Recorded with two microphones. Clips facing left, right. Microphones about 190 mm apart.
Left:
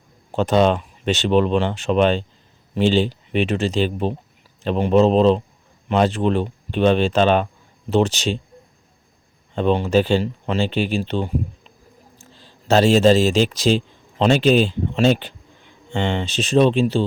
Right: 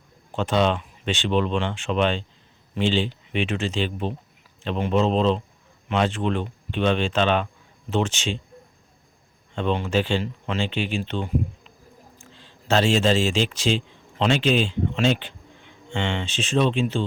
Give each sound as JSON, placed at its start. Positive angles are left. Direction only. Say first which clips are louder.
{"t": 0.3, "sound": "speech", "louder": "left 5 dB", "side_deg": 40}
{"t": 9.6, "sound": "speech", "louder": "left 6 dB", "side_deg": 35}
{"t": 12.2, "sound": "a man's voice", "louder": "left 1 dB", "side_deg": 40}